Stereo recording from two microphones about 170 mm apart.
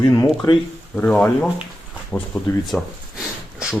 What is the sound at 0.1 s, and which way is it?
Speech, 20° left (ahead or behind).